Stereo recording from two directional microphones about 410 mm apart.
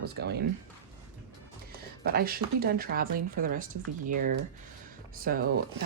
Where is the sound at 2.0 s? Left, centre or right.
Right.